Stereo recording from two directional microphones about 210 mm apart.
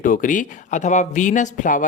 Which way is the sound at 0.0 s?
40° left (ahead or behind).